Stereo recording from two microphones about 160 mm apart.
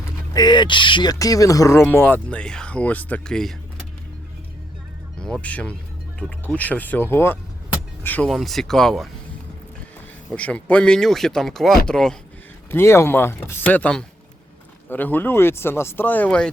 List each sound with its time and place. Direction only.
0.3 s speech: 25° left (ahead or behind); by 3.5 s 5° left (ahead or behind)
5.2 s speech: 5° left (ahead or behind)
8.3 s speech: centre (ahead or behind)
10.3 s speech: 5° left (ahead or behind)
12.7 s speech: 15° left (ahead or behind)